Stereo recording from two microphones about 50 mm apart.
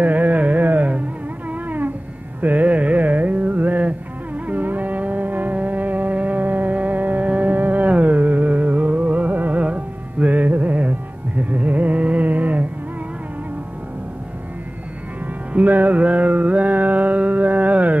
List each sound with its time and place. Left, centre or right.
0.0 s carnatic music: right
1.5 s a sound: right
2.4 s carnatic music: right
4.5 s music: right
15.5 s music: right